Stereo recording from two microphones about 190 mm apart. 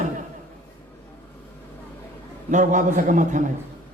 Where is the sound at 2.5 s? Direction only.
40° right (ahead or behind).